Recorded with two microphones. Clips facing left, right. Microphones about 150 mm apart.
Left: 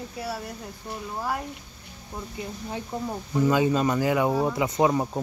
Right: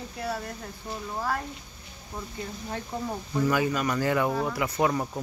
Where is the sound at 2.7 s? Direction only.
10° left (ahead or behind).